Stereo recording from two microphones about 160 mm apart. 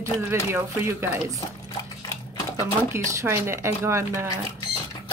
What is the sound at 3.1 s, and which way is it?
Speech, 15° right (ahead or behind).